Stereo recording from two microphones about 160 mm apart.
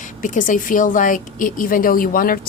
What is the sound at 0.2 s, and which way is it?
A woman's voice, 55° left (ahead or behind).